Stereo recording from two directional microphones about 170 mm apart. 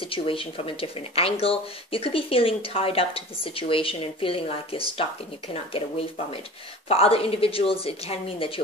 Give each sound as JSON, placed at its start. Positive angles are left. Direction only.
{"t": 0.0, "sound": "speech", "side_deg": 30}